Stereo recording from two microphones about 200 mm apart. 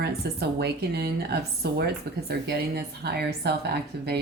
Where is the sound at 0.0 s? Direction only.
55° right (ahead or behind).